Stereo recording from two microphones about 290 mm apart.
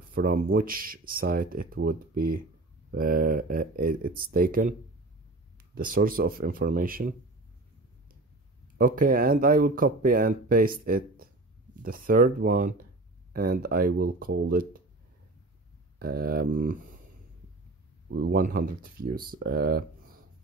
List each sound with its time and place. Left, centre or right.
0.1 s speech: right
5.8 s speech: right
8.7 s speech: right
16.0 s speech: right
18.1 s speech: right